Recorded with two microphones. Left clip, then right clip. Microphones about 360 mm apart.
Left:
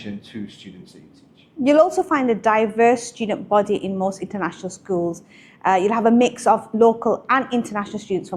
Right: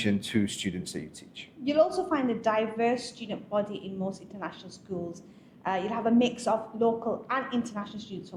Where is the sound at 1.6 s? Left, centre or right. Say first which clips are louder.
Left 10 dB; left.